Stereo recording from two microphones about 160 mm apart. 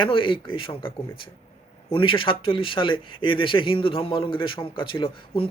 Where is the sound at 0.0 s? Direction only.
30° left (ahead or behind).